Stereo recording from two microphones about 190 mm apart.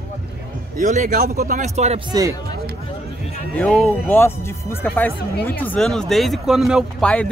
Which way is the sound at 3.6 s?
5° left (ahead or behind).